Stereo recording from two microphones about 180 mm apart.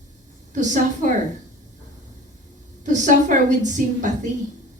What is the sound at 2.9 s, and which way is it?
A woman's voice, 45° right (ahead or behind).